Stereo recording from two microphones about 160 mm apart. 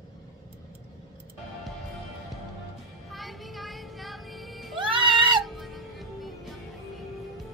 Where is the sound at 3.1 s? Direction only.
Centre (ahead or behind).